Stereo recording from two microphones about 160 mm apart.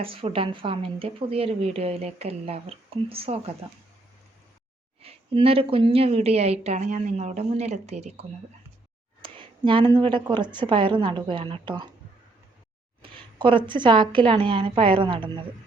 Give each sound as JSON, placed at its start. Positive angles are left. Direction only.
{"t": 0.0, "sound": "speech", "side_deg": -35}
{"t": 5.0, "sound": "speech", "side_deg": -35}
{"t": 9.2, "sound": "speech", "side_deg": -30}
{"t": 13.0, "sound": "speech", "side_deg": -35}